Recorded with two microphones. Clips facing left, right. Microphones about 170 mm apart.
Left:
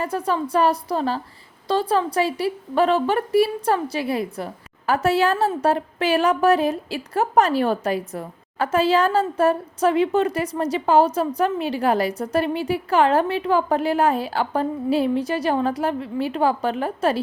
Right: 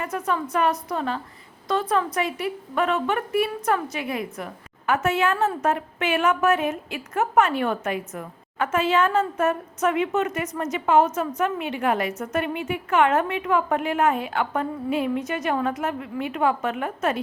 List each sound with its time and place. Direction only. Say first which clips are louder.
0.0 s a woman's voice: left 3 dB; 35° left (ahead or behind)